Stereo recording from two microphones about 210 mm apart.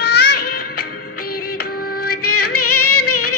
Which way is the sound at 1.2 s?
90° left.